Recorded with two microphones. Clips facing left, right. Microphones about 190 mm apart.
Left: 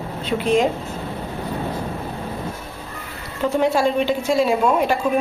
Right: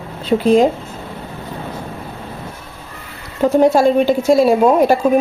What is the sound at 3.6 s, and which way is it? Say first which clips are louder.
A woman's voice: right 7 dB; 40° right (ahead or behind).